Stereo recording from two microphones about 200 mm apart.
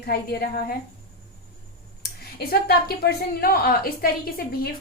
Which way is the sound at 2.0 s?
50° left (ahead or behind).